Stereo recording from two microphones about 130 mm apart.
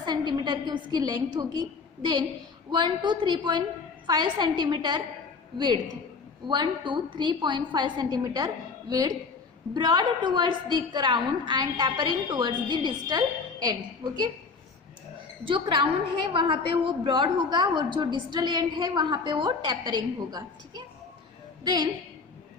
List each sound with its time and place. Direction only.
0.0 s a sound: 30° right (ahead or behind)
0.7 s a woman's voice: 30° right (ahead or behind)
15.4 s a woman's voice: 40° right (ahead or behind)